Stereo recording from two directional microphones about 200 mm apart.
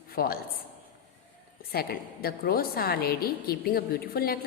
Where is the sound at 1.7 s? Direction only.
50° left (ahead or behind).